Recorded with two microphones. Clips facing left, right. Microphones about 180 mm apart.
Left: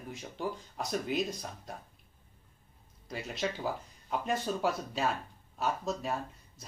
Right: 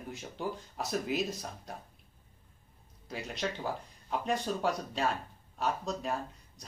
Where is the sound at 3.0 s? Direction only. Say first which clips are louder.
Left 1 dB; centre (ahead or behind).